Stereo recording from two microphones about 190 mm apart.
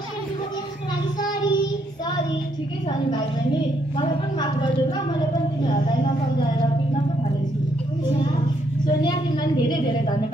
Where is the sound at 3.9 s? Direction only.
25° left (ahead or behind).